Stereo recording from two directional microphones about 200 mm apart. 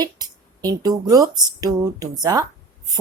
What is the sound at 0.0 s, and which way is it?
Speech, 20° right (ahead or behind).